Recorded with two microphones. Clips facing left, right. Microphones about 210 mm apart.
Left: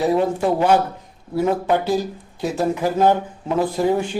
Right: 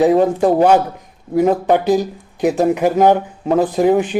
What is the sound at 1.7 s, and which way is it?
Speech, 15° right (ahead or behind).